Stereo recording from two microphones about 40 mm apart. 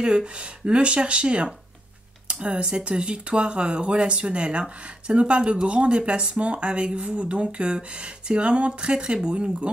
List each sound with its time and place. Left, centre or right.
0.0 s speech: right